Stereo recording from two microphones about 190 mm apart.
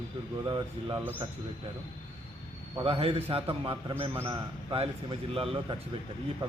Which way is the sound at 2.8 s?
30° right (ahead or behind).